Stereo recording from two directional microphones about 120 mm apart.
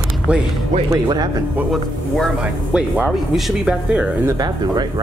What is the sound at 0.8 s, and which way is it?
Speech, 30° right (ahead or behind).